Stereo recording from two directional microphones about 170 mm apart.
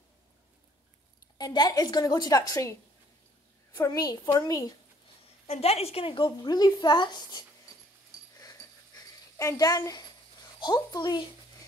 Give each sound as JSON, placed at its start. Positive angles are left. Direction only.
{"t": 1.4, "sound": "speech", "side_deg": 25}
{"t": 3.7, "sound": "speech", "side_deg": 20}
{"t": 5.5, "sound": "speech", "side_deg": 35}
{"t": 8.4, "sound": "a sound", "side_deg": 20}
{"t": 10.6, "sound": "speech", "side_deg": 25}